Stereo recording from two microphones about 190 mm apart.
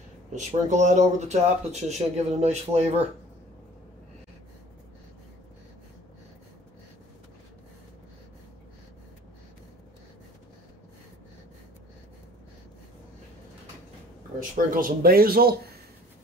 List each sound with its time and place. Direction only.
0.3 s speech: 40° right (ahead or behind)
14.7 s speech: 50° right (ahead or behind)